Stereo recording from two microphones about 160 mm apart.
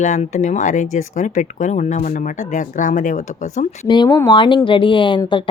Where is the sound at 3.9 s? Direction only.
25° left (ahead or behind).